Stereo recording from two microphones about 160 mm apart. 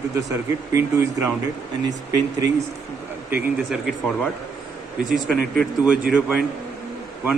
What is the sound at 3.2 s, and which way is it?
Speech, 5° right (ahead or behind).